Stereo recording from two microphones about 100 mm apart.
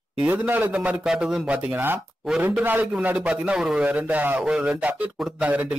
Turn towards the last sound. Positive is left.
turn(degrees=-10)  # may be behind; listen again after turning